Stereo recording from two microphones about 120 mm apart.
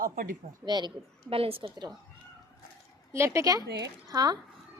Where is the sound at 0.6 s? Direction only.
35° right (ahead or behind).